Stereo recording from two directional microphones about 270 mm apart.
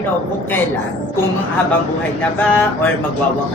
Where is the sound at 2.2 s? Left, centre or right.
Centre.